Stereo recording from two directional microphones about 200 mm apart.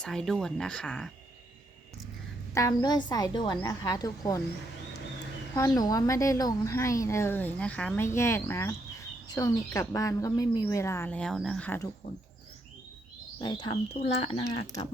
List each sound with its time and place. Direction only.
0.0 s speech: 5° left (ahead or behind)
2.6 s a woman's voice: 20° left (ahead or behind)
5.5 s a woman's voice: 20° left (ahead or behind)
13.4 s a woman's voice: 25° left (ahead or behind)